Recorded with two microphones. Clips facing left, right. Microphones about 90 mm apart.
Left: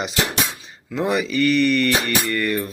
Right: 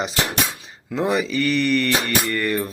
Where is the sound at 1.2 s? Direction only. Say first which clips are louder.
Left 3 dB; 30° right (ahead or behind).